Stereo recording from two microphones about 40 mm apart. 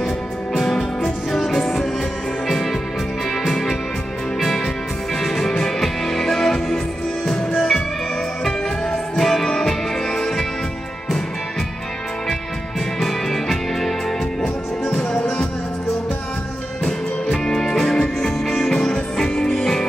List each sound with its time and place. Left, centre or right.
0.6 s music: centre
13.0 s music: centre
15.0 s music: left
16.8 s music: centre